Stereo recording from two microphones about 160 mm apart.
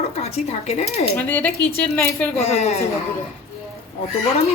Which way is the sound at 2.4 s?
40° left (ahead or behind).